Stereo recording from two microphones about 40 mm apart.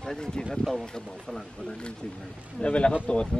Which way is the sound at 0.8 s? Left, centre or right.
Centre.